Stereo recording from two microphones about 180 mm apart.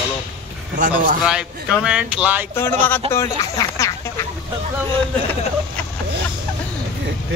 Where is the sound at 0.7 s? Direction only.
50° right (ahead or behind).